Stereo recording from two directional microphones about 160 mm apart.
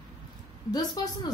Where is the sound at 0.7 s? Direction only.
25° left (ahead or behind).